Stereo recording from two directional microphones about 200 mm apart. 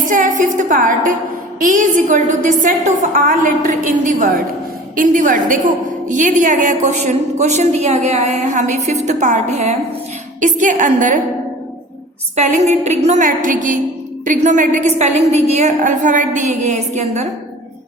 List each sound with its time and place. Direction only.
0.0 s a sound: 40° right (ahead or behind)
1.5 s a woman's voice: 40° right (ahead or behind)
12.4 s a woman's voice: 35° right (ahead or behind)